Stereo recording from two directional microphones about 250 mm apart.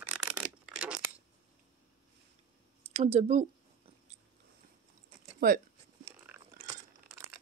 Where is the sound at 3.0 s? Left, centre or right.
Right.